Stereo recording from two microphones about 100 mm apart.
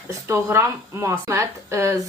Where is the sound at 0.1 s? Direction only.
30° right (ahead or behind).